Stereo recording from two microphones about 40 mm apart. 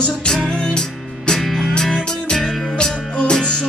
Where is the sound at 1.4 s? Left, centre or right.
Centre.